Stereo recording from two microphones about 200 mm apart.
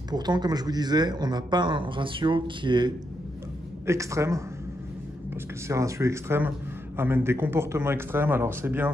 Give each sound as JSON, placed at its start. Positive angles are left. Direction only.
{"t": 0.1, "sound": "a man's voice", "side_deg": -20}